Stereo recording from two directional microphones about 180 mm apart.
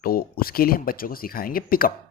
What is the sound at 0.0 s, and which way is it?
Speech, 55° left (ahead or behind).